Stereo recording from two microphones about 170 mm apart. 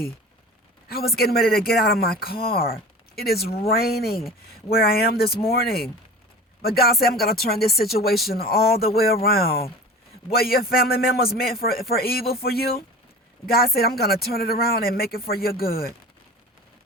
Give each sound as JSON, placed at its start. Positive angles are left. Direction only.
{"t": 0.9, "sound": "speech", "side_deg": 65}
{"t": 13.7, "sound": "speech", "side_deg": 65}